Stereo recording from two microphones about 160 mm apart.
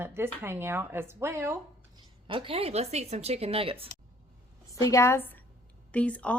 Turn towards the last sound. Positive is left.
turn(degrees=10)  # may be behind; listen again after turning